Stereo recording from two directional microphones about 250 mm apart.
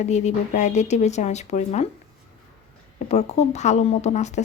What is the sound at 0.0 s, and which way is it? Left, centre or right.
Speech, left.